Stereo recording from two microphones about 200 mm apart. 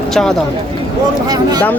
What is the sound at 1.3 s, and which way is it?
Speech, 20° right (ahead or behind).